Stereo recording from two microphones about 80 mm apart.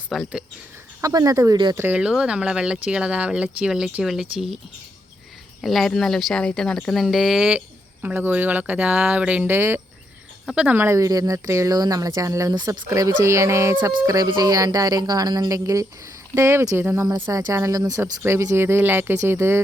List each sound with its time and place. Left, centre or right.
0.1 s speech: centre
1.0 s speech: right
1.9 s speech: centre
5.6 s speech: centre
7.0 s speech: centre
8.0 s speech: right
9.5 s speech: right
10.5 s speech: centre
10.8 s speech: right
12.5 s speech: right
12.9 s speech: right
14.4 s speech: right
18.0 s speech: right